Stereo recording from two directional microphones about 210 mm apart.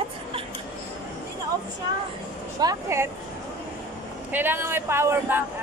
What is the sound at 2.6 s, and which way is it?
Speech, 15° right (ahead or behind).